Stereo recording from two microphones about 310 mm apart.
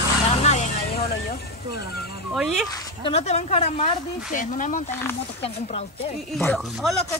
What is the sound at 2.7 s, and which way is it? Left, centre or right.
Speech, centre.